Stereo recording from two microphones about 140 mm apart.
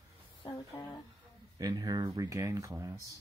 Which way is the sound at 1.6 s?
25° right (ahead or behind).